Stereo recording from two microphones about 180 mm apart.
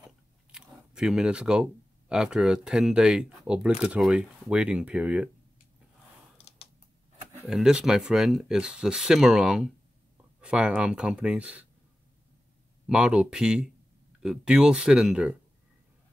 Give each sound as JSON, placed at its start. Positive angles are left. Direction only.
{"t": 0.5, "sound": "speech", "side_deg": -5}
{"t": 6.3, "sound": "computer keyboard", "side_deg": 35}
{"t": 7.4, "sound": "speech", "side_deg": -5}
{"t": 12.8, "sound": "speech", "side_deg": -5}